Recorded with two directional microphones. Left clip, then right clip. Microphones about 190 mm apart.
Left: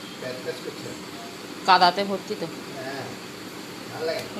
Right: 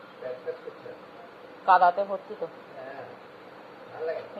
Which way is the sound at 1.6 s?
30° left (ahead or behind).